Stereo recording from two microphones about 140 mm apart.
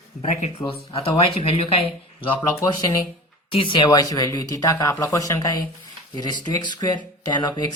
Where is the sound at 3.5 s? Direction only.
35° left (ahead or behind).